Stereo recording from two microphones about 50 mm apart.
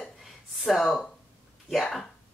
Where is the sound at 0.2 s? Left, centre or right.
Centre.